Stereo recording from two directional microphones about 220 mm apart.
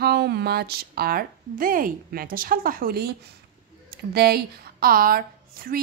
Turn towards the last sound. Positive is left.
turn(degrees=-40)  # may be behind; listen again after turning